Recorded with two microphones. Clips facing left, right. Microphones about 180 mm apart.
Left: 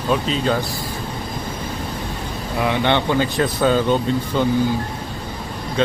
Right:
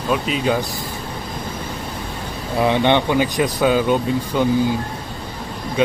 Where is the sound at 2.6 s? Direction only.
20° right (ahead or behind).